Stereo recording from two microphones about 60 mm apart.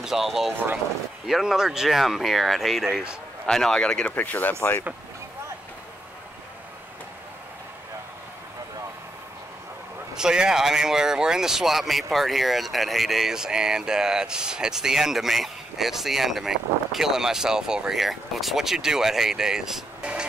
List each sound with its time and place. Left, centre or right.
0.0 s speech: centre
3.4 s speech: centre
4.1 s speech: left
10.1 s speech: centre
20.0 s vehicle: centre